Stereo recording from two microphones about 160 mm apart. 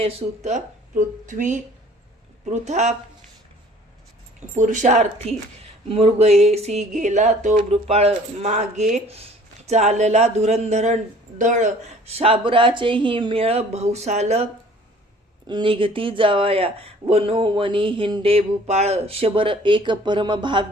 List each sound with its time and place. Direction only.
0.0 s speech: 40° right (ahead or behind)
4.5 s speech: 50° right (ahead or behind)
15.4 s speech: 30° right (ahead or behind)